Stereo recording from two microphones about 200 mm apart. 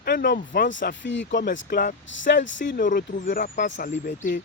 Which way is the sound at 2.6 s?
40° left (ahead or behind).